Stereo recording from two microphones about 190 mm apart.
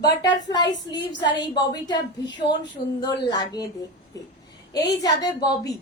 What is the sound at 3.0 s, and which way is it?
Speech, 20° left (ahead or behind).